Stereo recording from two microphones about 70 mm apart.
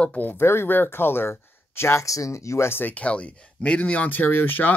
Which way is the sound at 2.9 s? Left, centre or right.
Centre.